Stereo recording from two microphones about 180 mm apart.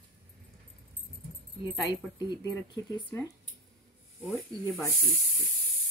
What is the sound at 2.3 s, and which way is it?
Speech, 20° left (ahead or behind).